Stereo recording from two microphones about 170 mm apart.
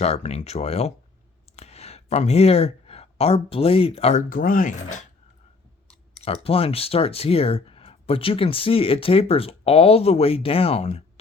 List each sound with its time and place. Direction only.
0.0 s speech: 40° left (ahead or behind)
4.2 s speech: 55° left (ahead or behind)
6.2 s speech: 35° left (ahead or behind)